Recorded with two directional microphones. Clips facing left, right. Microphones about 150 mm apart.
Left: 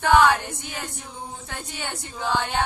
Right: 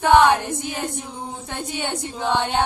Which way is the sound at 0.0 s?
25° right (ahead or behind).